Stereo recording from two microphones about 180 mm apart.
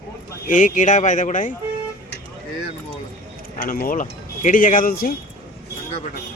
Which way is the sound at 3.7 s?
50° left (ahead or behind).